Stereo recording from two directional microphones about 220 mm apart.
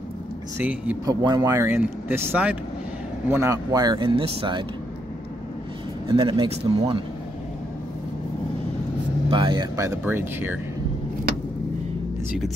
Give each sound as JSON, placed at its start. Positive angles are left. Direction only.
{"t": 0.6, "sound": "speech", "side_deg": -10}
{"t": 6.0, "sound": "speech", "side_deg": -25}
{"t": 9.3, "sound": "speech", "side_deg": -20}